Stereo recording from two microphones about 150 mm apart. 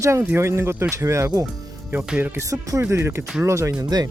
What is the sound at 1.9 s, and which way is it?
Speech, 10° right (ahead or behind).